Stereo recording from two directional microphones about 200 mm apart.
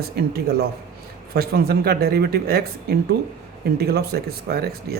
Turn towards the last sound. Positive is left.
turn(degrees=-50)  # may be behind; listen again after turning